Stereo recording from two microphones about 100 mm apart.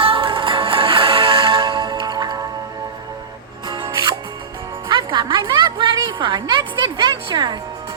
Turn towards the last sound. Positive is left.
turn(degrees=-45)  # may be behind; listen again after turning